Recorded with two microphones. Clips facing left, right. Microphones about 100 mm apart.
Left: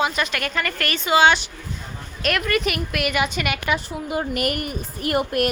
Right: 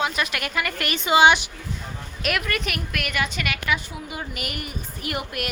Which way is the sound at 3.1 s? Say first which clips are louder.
Left 1 dB; 20° left (ahead or behind).